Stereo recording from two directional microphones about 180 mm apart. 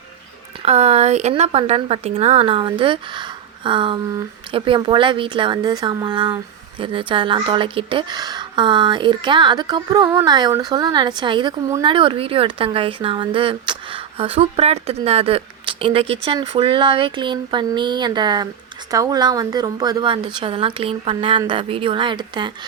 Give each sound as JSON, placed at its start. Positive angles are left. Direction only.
{"t": 0.6, "sound": "speech", "side_deg": -35}